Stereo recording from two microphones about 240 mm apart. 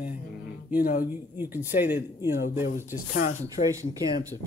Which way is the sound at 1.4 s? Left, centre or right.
Centre.